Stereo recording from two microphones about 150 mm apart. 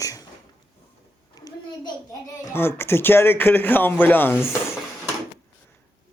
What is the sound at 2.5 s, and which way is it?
Speech, 15° left (ahead or behind).